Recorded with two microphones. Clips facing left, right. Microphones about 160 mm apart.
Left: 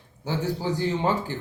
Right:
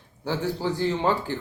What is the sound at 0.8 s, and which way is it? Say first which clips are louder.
Speech: right 2 dB; 15° left (ahead or behind).